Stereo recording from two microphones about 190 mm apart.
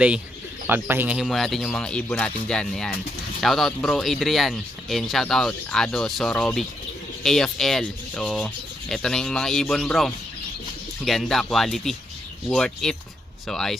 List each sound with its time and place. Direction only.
0.7 s speech: 10° right (ahead or behind)